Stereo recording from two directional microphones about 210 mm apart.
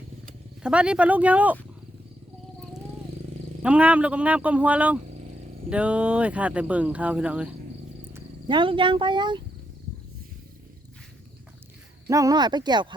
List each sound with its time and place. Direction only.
0.6 s speech: 5° right (ahead or behind)
3.6 s speech: 5° right (ahead or behind)
8.1 s speech: 20° right (ahead or behind)
12.0 s speech: 15° right (ahead or behind)